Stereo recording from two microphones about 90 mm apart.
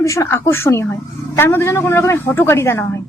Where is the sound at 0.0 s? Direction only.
35° left (ahead or behind).